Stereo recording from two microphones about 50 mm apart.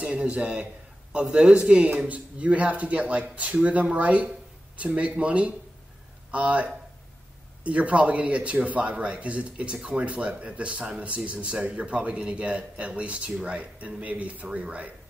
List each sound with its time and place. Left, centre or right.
0.0 s a man's voice: right
11.3 s a man's voice: centre